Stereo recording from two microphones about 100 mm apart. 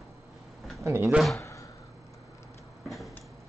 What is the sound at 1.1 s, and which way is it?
Speech, 5° right (ahead or behind).